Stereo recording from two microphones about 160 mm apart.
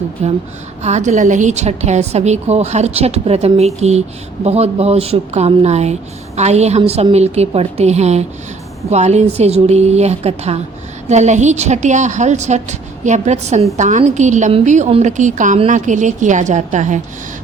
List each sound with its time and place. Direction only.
0.2 s a woman's voice: 45° right (ahead or behind)